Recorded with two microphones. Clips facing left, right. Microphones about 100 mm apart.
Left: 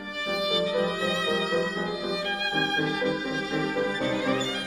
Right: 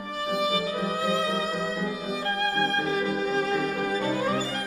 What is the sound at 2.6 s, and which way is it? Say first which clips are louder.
Music: left 2 dB; 40° right (ahead or behind).